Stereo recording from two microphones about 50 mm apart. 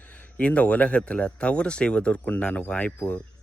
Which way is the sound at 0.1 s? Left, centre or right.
Left.